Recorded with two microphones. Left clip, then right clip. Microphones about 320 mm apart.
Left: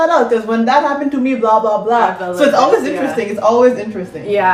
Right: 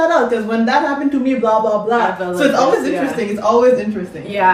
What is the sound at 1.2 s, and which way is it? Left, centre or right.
Speech, left.